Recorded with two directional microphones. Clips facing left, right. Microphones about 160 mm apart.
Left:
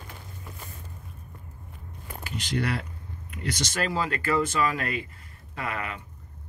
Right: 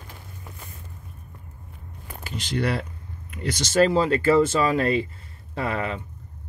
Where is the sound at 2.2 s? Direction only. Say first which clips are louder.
Right 3 dB; 30° right (ahead or behind).